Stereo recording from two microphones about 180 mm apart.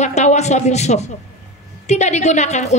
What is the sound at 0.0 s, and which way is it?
A woman's voice, 40° left (ahead or behind).